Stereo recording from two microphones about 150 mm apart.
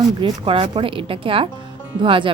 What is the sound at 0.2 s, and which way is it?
Speech, 35° right (ahead or behind).